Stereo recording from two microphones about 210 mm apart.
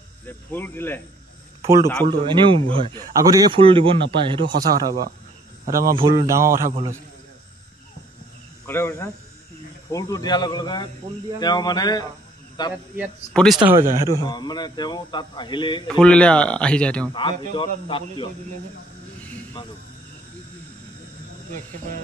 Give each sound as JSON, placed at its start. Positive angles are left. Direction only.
{"t": 0.3, "sound": "speech", "side_deg": 10}
{"t": 2.0, "sound": "speech", "side_deg": -25}
{"t": 6.2, "sound": "a man's voice", "side_deg": -15}
{"t": 8.6, "sound": "speech", "side_deg": 10}
{"t": 13.3, "sound": "speech", "side_deg": 0}
{"t": 13.7, "sound": "a man's voice", "side_deg": -10}
{"t": 14.0, "sound": "speech", "side_deg": 20}
{"t": 15.9, "sound": "speech", "side_deg": 5}
{"t": 17.1, "sound": "speech", "side_deg": 25}